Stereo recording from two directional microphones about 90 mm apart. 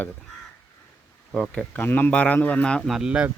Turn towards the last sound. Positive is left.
turn(degrees=-10)  # may be behind; listen again after turning